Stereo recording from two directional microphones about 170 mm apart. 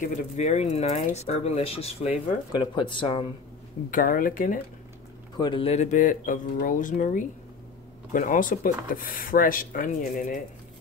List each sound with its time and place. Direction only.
0.0 s speech: 40° left (ahead or behind)
2.5 s speech: 25° left (ahead or behind)
3.9 s speech: 55° left (ahead or behind)
5.4 s speech: 30° left (ahead or behind); by 10.4 s 50° left (ahead or behind)